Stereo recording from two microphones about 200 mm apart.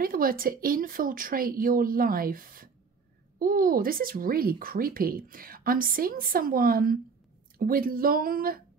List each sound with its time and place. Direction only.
0.0 s speech: 45° right (ahead or behind)